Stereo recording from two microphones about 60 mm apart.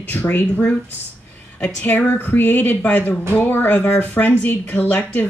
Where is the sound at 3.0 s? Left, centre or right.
Left.